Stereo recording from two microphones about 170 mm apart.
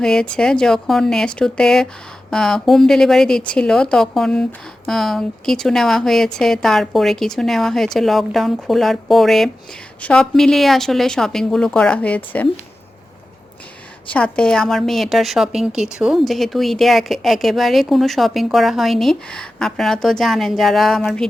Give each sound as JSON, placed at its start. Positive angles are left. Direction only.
{"t": 0.0, "sound": "a woman's voice", "side_deg": 5}
{"t": 14.1, "sound": "a woman's voice", "side_deg": 5}